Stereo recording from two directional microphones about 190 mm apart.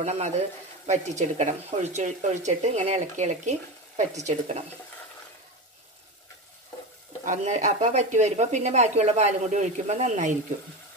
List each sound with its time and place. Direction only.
0.0 s speech: 35° right (ahead or behind)
7.2 s speech: 40° right (ahead or behind)